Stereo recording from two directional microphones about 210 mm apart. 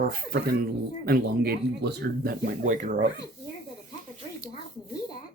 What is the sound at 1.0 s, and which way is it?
Speech, 45° right (ahead or behind).